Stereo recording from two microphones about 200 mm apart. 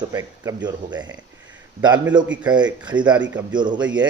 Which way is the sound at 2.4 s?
20° right (ahead or behind).